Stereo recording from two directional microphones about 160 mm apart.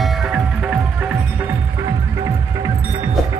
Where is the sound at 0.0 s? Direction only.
Centre (ahead or behind).